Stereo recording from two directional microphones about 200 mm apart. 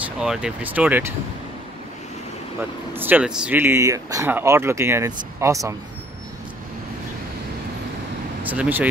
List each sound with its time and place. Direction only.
0.2 s speech: 5° right (ahead or behind)
2.9 s speech: 10° right (ahead or behind)
8.5 s speech: 10° right (ahead or behind)